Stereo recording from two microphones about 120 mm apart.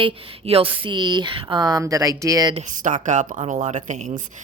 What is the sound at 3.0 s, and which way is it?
Speech, 90° right.